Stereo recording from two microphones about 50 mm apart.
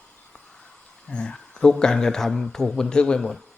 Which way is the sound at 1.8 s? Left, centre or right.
Centre.